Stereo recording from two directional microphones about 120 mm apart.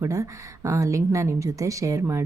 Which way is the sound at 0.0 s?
25° right (ahead or behind).